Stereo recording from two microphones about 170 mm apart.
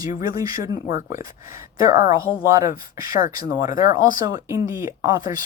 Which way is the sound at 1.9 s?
50° left (ahead or behind).